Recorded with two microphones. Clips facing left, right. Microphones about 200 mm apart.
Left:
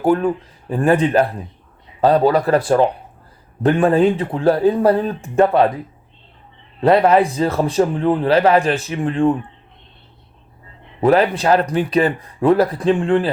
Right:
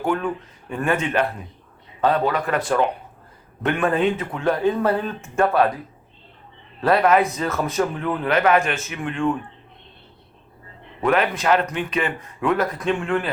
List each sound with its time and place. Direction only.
0.0 s speech: 35° left (ahead or behind)
6.8 s speech: 25° left (ahead or behind)
11.0 s speech: 35° left (ahead or behind)